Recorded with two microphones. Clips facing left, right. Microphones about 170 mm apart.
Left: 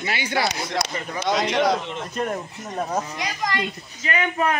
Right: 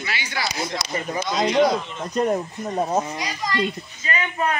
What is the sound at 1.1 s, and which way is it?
Speech, 75° left (ahead or behind).